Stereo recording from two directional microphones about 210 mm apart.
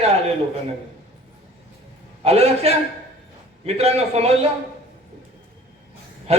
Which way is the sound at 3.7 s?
30° right (ahead or behind).